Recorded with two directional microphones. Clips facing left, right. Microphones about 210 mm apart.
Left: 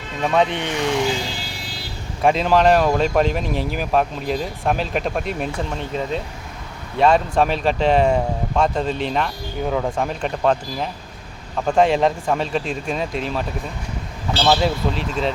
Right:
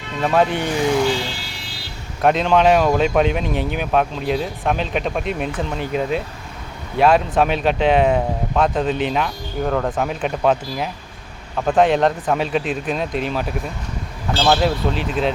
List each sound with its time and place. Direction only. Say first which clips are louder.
0.2 s speech: right 2 dB; 5° right (ahead or behind)
2.2 s speech: right 1 dB; centre (ahead or behind)
5.9 s speech: right 4 dB; 10° right (ahead or behind)
14.6 s speech: right 1 dB; centre (ahead or behind)